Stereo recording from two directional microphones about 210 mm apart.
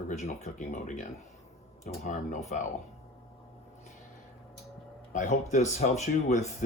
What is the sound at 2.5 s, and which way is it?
Speech, 40° left (ahead or behind).